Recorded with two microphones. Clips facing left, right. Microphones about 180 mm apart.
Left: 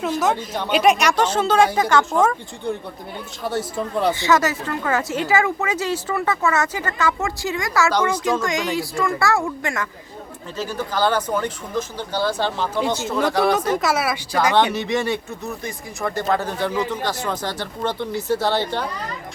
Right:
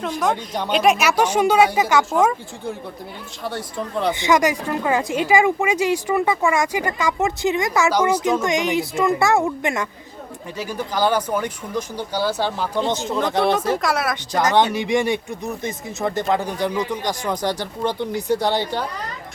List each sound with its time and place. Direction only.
0.0 s speech: 5° left (ahead or behind)
3.4 s speech: 5° left (ahead or behind)
4.1 s speech: 15° right (ahead or behind)
13.7 s speech: 5° left (ahead or behind)
14.7 s speech: 10° right (ahead or behind)